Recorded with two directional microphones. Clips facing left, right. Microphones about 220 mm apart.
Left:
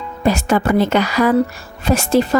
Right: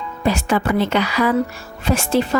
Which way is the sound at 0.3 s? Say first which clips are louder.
Left 3 dB; 45° left (ahead or behind).